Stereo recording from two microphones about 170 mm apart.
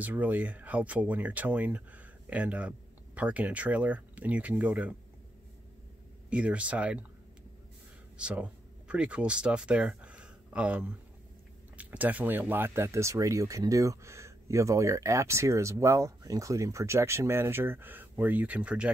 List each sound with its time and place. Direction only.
0.0 s speech: 10° right (ahead or behind)
6.3 s speech: 5° right (ahead or behind)
8.2 s speech: 5° right (ahead or behind)